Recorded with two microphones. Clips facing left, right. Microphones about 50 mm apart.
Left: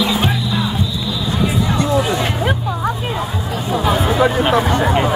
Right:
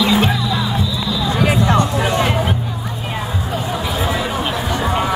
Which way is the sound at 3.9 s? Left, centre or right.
Left.